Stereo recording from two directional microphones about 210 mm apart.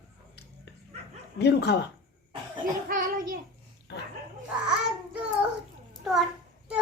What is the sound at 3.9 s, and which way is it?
Dog, 55° left (ahead or behind).